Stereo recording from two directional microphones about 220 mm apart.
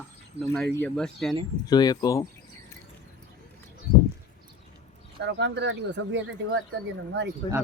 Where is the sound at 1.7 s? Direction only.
20° left (ahead or behind).